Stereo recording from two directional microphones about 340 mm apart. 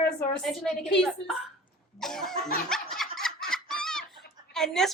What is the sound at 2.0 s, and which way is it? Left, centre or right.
Speech, centre.